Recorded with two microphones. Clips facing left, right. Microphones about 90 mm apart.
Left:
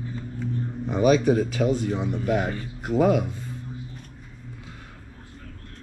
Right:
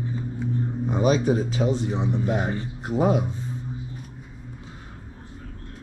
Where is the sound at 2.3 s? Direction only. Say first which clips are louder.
Left 1 dB; 25° right (ahead or behind).